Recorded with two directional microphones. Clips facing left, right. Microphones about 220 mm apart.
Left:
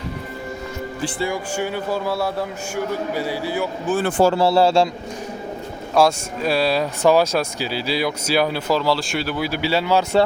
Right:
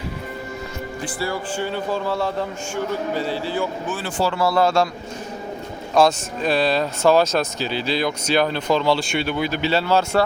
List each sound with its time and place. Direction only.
1.2 s speech: 15° left (ahead or behind)
3.9 s speech: 50° left (ahead or behind)
4.4 s a man's voice: 30° left (ahead or behind)
5.9 s speech: 10° left (ahead or behind)